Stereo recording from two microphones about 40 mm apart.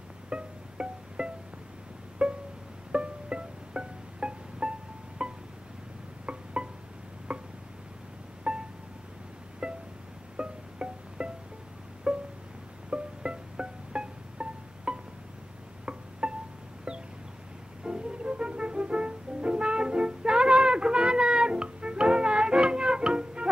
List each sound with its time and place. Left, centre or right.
0.3 s music: right
7.3 s a sound: right
8.5 s music: right
9.6 s music: right
17.8 s music: right